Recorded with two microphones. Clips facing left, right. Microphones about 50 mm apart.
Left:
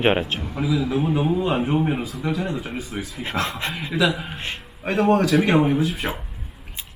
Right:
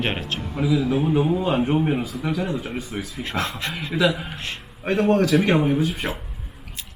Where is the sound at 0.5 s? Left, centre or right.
Centre.